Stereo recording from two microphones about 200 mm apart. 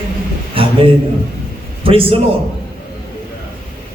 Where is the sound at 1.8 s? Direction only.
25° right (ahead or behind).